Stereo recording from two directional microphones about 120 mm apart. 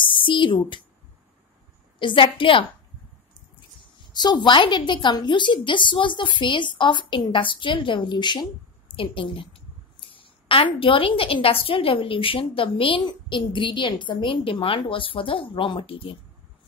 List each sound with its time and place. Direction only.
0.0 s speech: 45° left (ahead or behind)
2.0 s a woman's voice: 45° left (ahead or behind)
4.1 s a woman's voice: 35° left (ahead or behind)